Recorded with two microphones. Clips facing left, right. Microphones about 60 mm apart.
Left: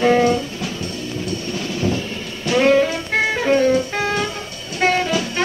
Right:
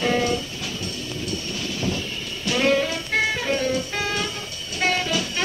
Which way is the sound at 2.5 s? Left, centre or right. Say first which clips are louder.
Left 6 dB; left.